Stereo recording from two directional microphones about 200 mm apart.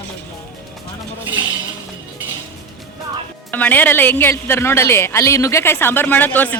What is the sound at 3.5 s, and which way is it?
A woman's voice, 10° left (ahead or behind).